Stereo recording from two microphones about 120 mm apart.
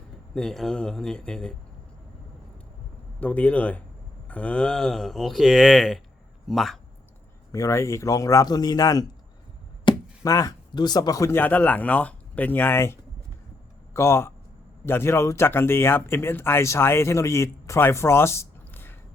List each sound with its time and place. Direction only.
0.3 s speech: 5° left (ahead or behind)
3.2 s speech: 15° left (ahead or behind)
7.5 s speech: 25° left (ahead or behind)
9.9 s chop: 40° left (ahead or behind)
10.2 s speech: 30° left (ahead or behind)
11.3 s speech: 15° left (ahead or behind)